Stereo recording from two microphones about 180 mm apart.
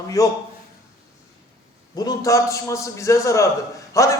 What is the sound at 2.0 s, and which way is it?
Speech, 20° left (ahead or behind).